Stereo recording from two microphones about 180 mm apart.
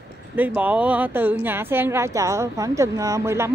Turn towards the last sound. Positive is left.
turn(degrees=-15)  # may be behind; listen again after turning